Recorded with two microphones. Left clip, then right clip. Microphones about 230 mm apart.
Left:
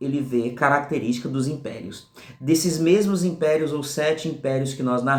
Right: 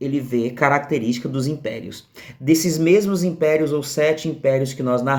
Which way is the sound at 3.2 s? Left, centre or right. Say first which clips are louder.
Right 3 dB; right.